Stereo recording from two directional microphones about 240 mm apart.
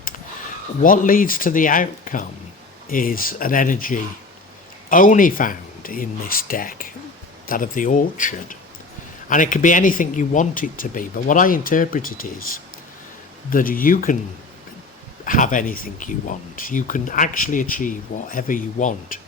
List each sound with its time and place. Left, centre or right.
0.8 s speech: left
13.5 s speech: left
15.2 s speech: left